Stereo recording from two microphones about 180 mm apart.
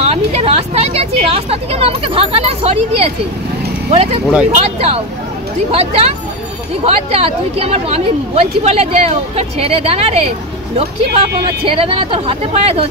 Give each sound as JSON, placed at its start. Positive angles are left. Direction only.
{"t": 0.0, "sound": "a woman's voice", "side_deg": -35}